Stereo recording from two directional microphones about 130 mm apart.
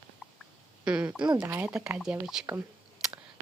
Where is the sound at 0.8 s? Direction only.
5° right (ahead or behind).